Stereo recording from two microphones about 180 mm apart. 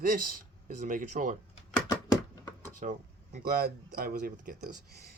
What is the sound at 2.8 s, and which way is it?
Speech, 45° right (ahead or behind).